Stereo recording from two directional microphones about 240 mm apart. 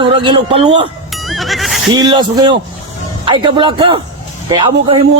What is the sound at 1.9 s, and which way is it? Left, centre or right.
Speech, centre.